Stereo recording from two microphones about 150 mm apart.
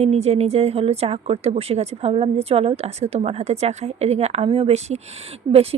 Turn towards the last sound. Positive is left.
turn(degrees=-40)  # may be behind; listen again after turning